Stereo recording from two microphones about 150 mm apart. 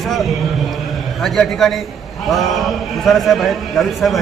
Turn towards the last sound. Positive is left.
turn(degrees=0)  # may be behind; listen again after turning